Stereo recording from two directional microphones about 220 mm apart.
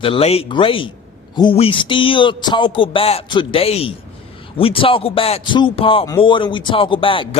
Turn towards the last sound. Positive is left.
turn(degrees=25)  # may be behind; listen again after turning